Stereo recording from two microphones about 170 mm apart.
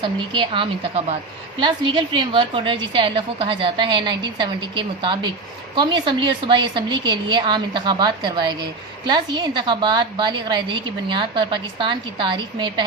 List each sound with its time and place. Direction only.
0.0 s a woman's voice: 30° right (ahead or behind)